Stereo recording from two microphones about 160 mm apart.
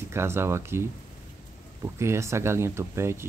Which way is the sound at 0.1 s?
15° right (ahead or behind).